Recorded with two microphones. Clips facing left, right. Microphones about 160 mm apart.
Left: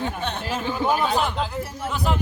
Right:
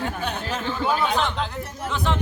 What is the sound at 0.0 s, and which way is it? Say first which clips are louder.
Speech: even; 5° right (ahead or behind).